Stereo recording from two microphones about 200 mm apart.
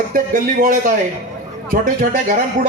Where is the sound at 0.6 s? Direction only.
40° right (ahead or behind).